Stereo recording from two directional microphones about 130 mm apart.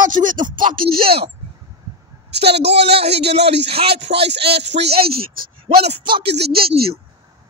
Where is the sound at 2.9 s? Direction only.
50° right (ahead or behind).